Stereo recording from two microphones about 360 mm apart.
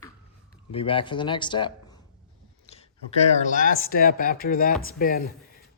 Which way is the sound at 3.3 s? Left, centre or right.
Left.